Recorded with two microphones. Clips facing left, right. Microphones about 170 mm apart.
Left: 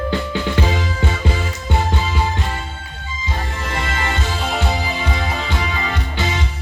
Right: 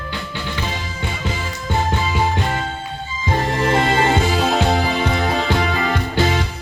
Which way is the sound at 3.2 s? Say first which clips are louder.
Right 9 dB; 60° right (ahead or behind).